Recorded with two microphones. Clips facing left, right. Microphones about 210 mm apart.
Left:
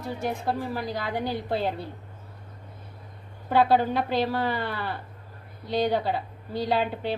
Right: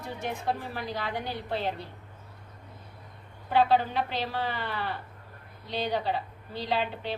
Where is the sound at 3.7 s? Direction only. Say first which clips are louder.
Left 4 dB; 45° left (ahead or behind).